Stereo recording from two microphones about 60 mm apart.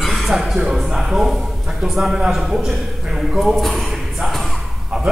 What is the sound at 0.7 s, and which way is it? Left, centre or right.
A man's voice, centre.